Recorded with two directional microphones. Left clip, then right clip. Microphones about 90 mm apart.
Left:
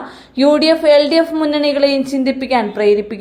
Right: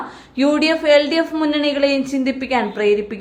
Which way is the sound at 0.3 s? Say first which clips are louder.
Left 5 dB; 25° left (ahead or behind).